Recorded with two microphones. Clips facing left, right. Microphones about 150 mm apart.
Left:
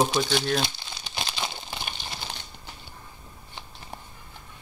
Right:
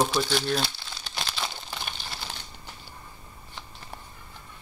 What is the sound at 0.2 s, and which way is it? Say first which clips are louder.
Speech: left 1 dB; 15° left (ahead or behind).